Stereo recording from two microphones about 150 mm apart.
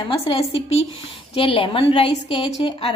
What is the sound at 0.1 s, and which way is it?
A woman's voice, 40° left (ahead or behind).